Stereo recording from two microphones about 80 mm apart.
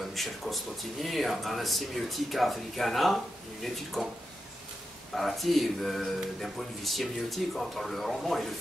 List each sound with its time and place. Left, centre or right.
0.0 s speech: centre
5.1 s speech: centre